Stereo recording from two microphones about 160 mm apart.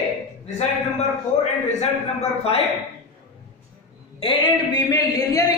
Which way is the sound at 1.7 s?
45° left (ahead or behind).